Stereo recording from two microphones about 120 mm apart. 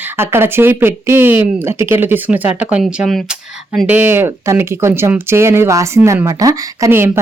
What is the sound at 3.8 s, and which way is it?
A woman's voice, 15° right (ahead or behind).